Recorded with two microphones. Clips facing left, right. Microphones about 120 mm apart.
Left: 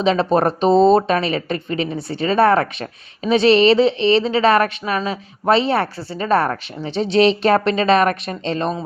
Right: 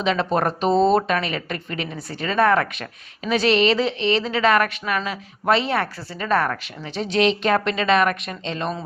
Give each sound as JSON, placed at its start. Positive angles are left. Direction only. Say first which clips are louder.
{"t": 0.0, "sound": "speech", "louder": "left 5 dB", "side_deg": 30}